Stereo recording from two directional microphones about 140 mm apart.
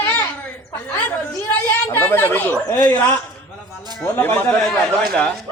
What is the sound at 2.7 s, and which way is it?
Speech, 30° left (ahead or behind).